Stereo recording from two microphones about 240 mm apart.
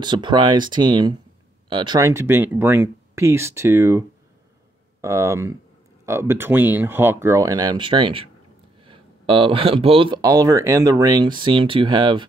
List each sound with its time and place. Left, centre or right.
0.0 s speech: centre
5.0 s speech: centre